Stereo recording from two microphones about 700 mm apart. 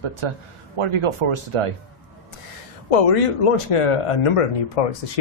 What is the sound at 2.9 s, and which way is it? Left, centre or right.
Speech, left.